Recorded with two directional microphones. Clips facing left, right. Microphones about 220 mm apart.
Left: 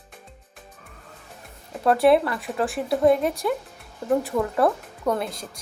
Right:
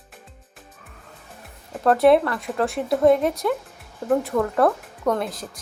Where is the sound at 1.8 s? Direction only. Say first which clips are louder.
Right 2 dB; 5° left (ahead or behind).